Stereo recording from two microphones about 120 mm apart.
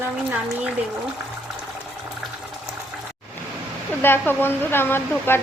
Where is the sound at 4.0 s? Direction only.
15° left (ahead or behind).